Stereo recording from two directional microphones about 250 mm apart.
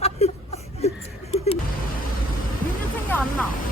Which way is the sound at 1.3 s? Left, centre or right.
Left.